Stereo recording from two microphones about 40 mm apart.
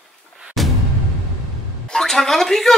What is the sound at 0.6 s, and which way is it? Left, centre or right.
Music, centre.